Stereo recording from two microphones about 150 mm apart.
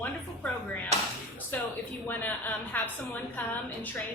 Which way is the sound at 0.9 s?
50° right (ahead or behind).